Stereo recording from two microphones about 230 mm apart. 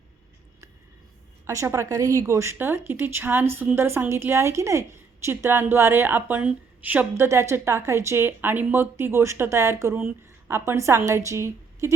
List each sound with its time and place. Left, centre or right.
1.5 s a woman's voice: centre